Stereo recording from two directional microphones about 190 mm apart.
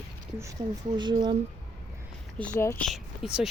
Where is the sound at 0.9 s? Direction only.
25° right (ahead or behind).